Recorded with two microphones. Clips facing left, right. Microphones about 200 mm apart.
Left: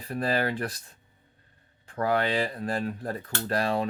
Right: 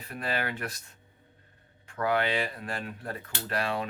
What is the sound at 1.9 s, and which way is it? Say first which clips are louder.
Speech: left 2 dB; 35° left (ahead or behind).